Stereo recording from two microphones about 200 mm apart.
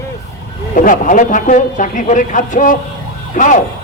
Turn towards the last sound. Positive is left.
turn(degrees=40)  # may be behind; listen again after turning